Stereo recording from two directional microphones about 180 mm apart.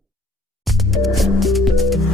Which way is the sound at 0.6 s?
Centre (ahead or behind).